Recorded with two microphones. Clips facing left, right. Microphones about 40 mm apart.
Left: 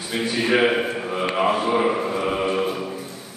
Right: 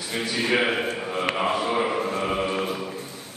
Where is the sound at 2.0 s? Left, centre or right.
Centre.